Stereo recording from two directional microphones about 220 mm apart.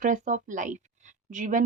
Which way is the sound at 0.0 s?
35° right (ahead or behind).